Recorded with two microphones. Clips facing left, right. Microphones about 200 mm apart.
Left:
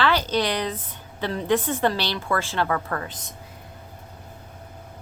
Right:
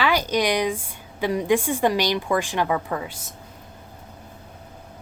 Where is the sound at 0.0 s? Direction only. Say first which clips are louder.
Right 1 dB; 10° right (ahead or behind).